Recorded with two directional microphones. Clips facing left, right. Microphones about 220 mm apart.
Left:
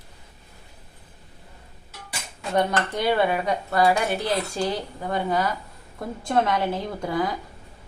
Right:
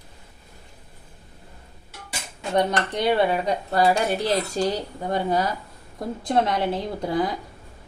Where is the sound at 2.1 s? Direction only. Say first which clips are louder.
Right 1 dB; 20° right (ahead or behind).